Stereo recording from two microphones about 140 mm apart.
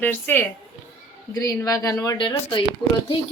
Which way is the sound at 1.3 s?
25° left (ahead or behind).